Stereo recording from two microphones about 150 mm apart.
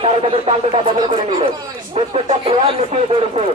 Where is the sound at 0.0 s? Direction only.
40° right (ahead or behind).